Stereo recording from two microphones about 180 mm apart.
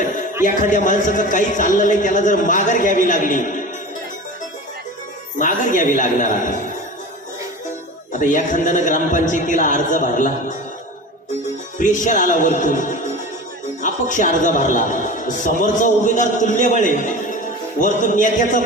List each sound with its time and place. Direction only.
0.4 s a man's voice: 45° left (ahead or behind)
5.4 s a man's voice: 45° left (ahead or behind)
8.2 s a man's voice: 45° left (ahead or behind)
11.8 s a man's voice: 45° left (ahead or behind)